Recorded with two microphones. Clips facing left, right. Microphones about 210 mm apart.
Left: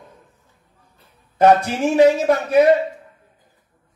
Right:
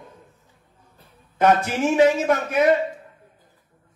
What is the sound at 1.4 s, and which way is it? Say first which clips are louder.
A man's voice: left 4 dB; 35° left (ahead or behind).